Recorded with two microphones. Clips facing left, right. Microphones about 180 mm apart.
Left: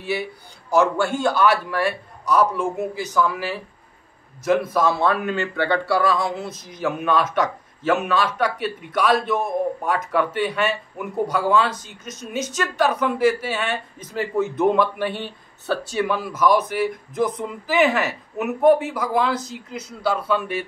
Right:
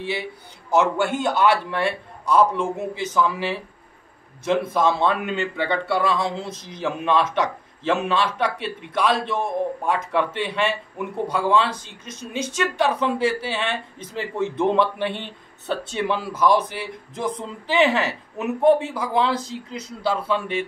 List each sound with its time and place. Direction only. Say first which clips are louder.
0.7 s speech: left 1 dB; 20° right (ahead or behind)